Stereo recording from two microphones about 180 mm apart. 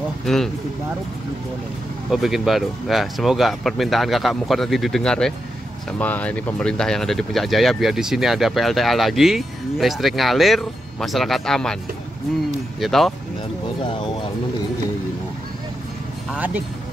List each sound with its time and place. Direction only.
0.2 s speech: centre (ahead or behind)
2.0 s speech: centre (ahead or behind)
12.8 s speech: centre (ahead or behind)
16.3 s speech: 10° right (ahead or behind)